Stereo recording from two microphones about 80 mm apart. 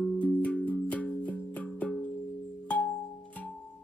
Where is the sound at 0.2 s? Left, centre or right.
Centre.